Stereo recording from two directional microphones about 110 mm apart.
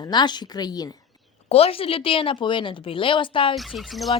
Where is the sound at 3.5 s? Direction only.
Centre (ahead or behind).